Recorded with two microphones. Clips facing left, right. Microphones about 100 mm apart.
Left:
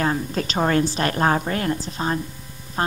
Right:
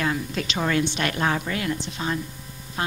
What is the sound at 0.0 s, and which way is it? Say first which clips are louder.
A woman's voice: left 3 dB; 40° left (ahead or behind).